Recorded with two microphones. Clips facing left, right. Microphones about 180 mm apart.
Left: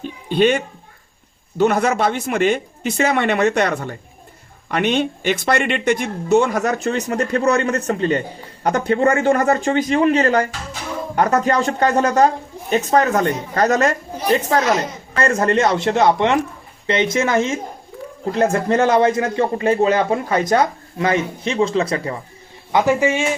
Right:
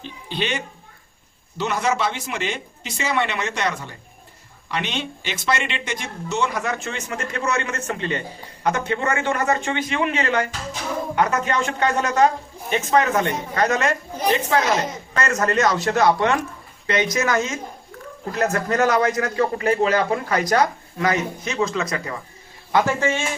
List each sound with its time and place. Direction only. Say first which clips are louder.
0.0 s a sound: left 11 dB; 50° left (ahead or behind)
1.5 s a man's voice: left 6 dB; 55° left (ahead or behind); by 22.1 s 30° left (ahead or behind)
22.7 s a man's voice: left 4 dB; 15° left (ahead or behind)